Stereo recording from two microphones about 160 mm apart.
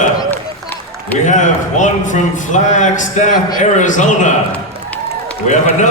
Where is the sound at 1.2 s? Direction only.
50° left (ahead or behind).